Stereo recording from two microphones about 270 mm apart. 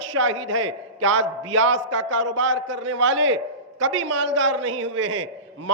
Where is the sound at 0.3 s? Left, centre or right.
Right.